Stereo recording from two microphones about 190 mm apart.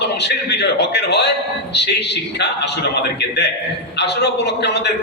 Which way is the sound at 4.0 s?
65° left (ahead or behind).